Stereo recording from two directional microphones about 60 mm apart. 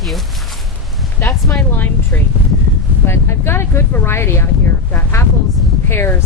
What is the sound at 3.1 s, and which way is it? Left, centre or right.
Speech, left.